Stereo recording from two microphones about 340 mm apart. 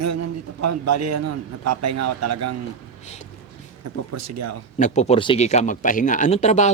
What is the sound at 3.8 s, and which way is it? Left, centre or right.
Speech, right.